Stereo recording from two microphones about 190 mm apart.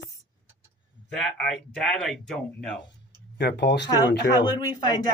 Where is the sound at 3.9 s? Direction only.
20° left (ahead or behind).